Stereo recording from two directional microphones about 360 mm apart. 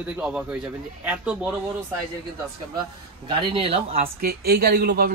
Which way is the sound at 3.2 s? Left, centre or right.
Centre.